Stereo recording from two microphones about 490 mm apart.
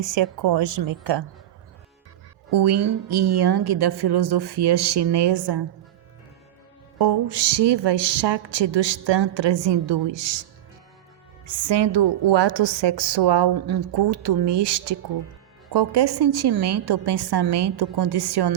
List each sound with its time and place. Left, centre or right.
0.2 s a woman's voice: right
2.5 s a woman's voice: right
7.0 s speech: right
11.6 s a woman's voice: right